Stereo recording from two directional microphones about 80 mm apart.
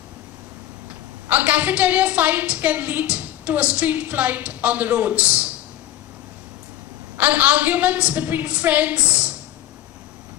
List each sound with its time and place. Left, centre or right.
1.3 s a woman's voice: centre
7.2 s a woman's voice: centre